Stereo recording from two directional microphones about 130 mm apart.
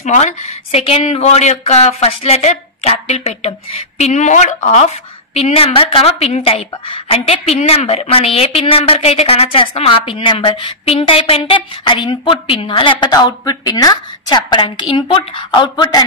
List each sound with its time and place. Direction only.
0.0 s speech: 65° left (ahead or behind); by 13.1 s 40° left (ahead or behind)
13.1 s a woman's voice: 30° left (ahead or behind)